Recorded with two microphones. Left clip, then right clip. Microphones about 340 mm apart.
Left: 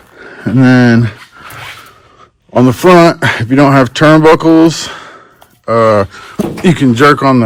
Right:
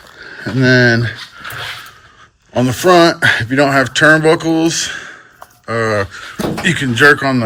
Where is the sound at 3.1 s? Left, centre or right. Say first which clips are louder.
Left 2 dB; centre.